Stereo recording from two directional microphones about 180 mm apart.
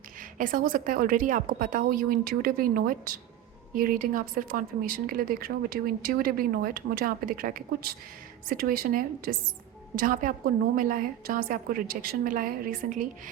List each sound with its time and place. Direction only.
0.2 s a woman's voice: 50° right (ahead or behind)